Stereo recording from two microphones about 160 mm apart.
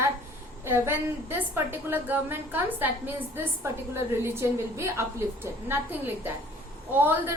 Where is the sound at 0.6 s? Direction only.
15° right (ahead or behind).